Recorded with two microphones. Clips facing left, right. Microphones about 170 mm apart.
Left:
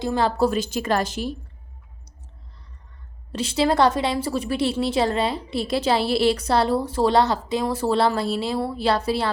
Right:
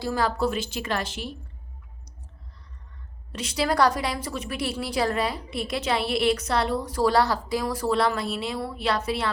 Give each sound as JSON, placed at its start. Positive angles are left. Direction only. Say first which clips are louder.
{"t": 0.0, "sound": "a woman's voice", "louder": "left 4 dB", "side_deg": 25}
{"t": 3.3, "sound": "a woman's voice", "louder": "left 4 dB", "side_deg": 30}